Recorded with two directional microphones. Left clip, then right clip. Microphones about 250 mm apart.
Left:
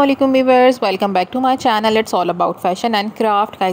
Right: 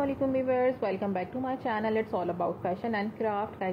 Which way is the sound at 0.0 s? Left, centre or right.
Left.